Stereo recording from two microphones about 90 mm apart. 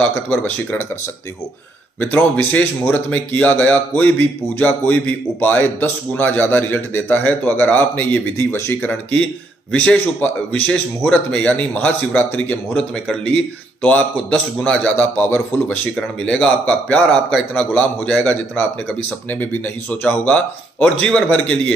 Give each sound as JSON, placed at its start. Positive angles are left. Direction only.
{"t": 0.3, "sound": "a man's voice", "side_deg": 20}
{"t": 2.0, "sound": "a man's voice", "side_deg": 20}
{"t": 9.7, "sound": "a man's voice", "side_deg": 15}
{"t": 16.0, "sound": "a man's voice", "side_deg": 10}